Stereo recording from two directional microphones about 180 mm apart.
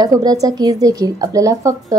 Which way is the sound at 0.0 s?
20° right (ahead or behind).